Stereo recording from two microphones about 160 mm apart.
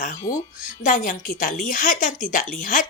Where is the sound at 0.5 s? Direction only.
55° left (ahead or behind).